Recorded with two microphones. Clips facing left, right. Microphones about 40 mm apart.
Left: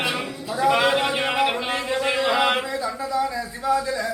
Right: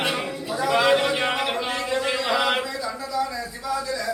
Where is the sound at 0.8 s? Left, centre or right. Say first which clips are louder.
Right 1 dB; centre.